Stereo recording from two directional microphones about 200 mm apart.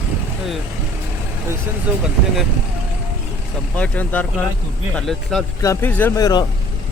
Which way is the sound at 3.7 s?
5° left (ahead or behind).